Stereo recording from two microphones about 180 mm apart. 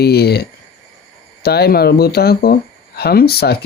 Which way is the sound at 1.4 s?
60° left (ahead or behind).